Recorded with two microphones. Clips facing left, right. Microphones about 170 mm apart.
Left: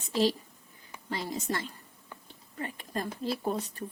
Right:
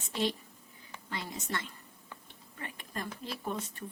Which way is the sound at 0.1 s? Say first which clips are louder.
Left 6 dB; 35° left (ahead or behind).